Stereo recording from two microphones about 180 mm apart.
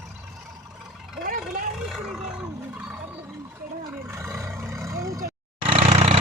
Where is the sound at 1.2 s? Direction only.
50° right (ahead or behind).